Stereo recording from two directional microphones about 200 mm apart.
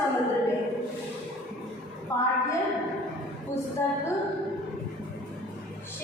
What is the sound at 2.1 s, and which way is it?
Speech, 15° left (ahead or behind).